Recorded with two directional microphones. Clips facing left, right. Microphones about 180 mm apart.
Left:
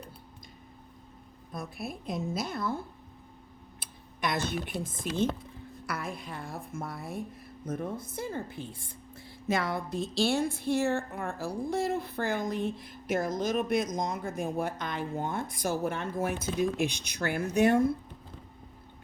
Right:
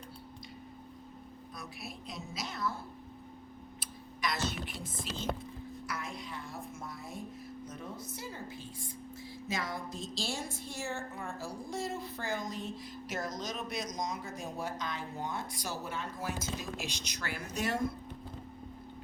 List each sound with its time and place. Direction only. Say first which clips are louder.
1.5 s a woman's voice: left 9 dB; 50° left (ahead or behind)
3.8 s a sound: left 3 dB; 55° left (ahead or behind)
5.8 s music: left 6 dB; 55° left (ahead or behind)
7.7 s a woman's voice: left 13 dB; 55° left (ahead or behind)